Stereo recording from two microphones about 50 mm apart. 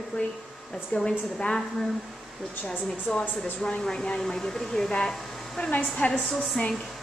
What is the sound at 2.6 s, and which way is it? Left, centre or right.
Speech, centre.